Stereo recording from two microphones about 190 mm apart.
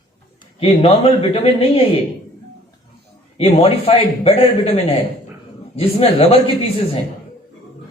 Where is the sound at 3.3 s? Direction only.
30° left (ahead or behind).